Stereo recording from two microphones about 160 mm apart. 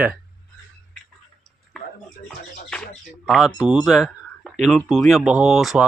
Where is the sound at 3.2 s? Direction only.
Centre (ahead or behind).